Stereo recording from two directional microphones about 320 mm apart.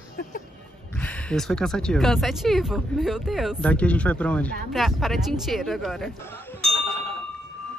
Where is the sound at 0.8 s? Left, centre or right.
Centre.